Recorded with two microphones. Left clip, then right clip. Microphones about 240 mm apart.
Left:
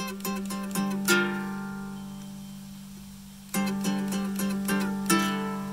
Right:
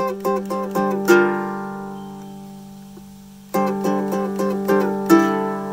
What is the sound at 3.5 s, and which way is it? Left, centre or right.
Music, right.